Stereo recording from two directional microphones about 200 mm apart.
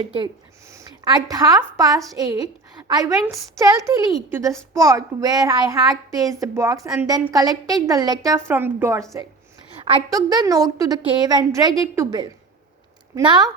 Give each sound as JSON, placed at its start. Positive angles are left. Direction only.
{"t": 0.7, "sound": "a woman's voice", "side_deg": -20}
{"t": 10.1, "sound": "a woman's voice", "side_deg": -20}